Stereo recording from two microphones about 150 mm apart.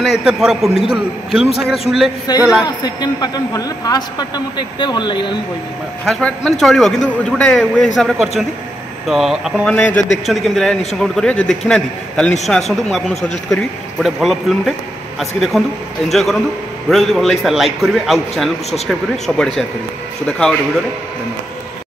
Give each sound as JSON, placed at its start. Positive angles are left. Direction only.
{"t": 0.0, "sound": "a man's voice", "side_deg": -5}
{"t": 2.6, "sound": "speech", "side_deg": 25}
{"t": 6.0, "sound": "a man's voice", "side_deg": 5}